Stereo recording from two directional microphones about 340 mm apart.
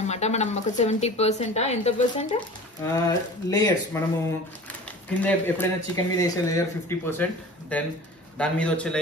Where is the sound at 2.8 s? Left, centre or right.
Centre.